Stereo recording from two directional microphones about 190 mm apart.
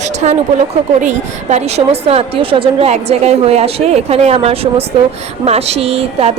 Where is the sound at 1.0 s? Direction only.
35° right (ahead or behind).